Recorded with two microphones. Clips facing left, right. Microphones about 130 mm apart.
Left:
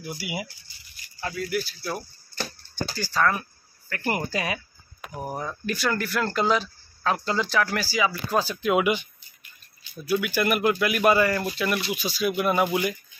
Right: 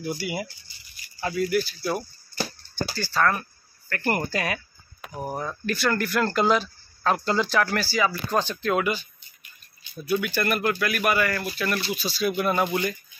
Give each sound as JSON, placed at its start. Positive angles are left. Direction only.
{"t": 0.0, "sound": "speech", "side_deg": 5}
{"t": 1.2, "sound": "speech", "side_deg": -5}
{"t": 10.0, "sound": "speech", "side_deg": 5}